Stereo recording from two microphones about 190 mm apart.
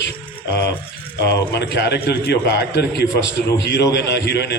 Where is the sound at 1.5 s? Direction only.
60° left (ahead or behind).